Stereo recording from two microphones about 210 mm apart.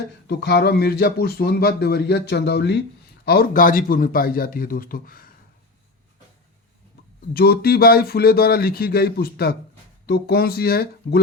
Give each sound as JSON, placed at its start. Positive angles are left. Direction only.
{"t": 0.3, "sound": "a man's voice", "side_deg": 50}
{"t": 7.3, "sound": "a man's voice", "side_deg": 50}